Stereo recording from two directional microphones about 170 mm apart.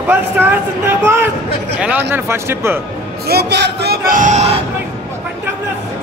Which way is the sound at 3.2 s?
75° right (ahead or behind).